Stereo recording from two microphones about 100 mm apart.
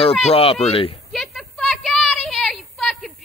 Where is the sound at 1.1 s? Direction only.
5° left (ahead or behind).